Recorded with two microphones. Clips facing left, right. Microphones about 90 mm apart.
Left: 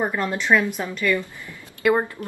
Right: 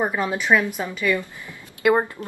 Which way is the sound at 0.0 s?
10° right (ahead or behind).